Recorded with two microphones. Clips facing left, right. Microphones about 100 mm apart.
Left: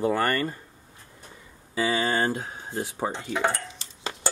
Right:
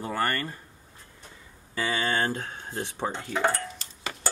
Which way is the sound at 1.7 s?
5° left (ahead or behind).